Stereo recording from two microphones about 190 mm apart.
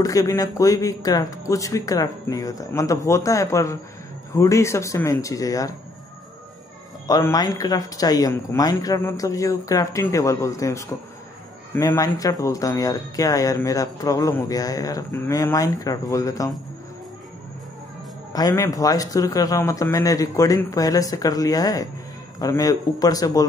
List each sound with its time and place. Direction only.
0.0 s speech: 20° left (ahead or behind)
7.1 s speech: 20° left (ahead or behind)
18.3 s speech: 20° left (ahead or behind)